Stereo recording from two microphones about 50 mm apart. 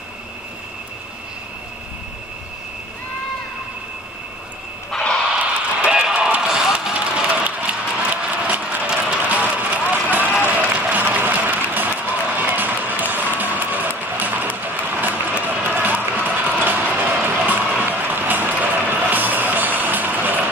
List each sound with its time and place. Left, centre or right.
4.9 s a sound: centre
5.9 s run: centre
6.1 s music: right
6.4 s music: centre
6.8 s a sound: centre
10.4 s applause: right
17.5 s vehicle: right
18.5 s music: right